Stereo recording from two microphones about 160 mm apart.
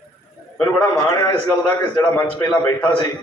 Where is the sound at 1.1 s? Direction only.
20° left (ahead or behind).